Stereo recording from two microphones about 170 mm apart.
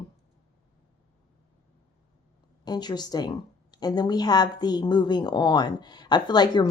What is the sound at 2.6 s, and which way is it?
A woman's voice, 25° left (ahead or behind).